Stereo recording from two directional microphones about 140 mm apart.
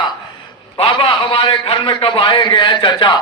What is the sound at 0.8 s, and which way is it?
A man's voice, 40° left (ahead or behind).